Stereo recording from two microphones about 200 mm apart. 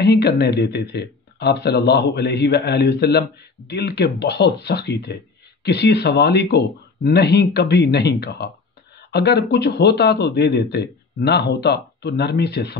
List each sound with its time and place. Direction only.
0.0 s speech: 55° left (ahead or behind)